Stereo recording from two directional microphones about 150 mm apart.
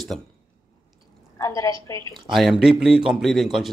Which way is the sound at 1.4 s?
20° left (ahead or behind).